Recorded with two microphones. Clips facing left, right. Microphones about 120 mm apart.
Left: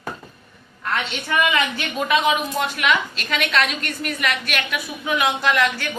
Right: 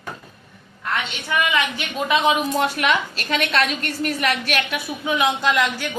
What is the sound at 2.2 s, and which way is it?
A woman's voice, 35° right (ahead or behind).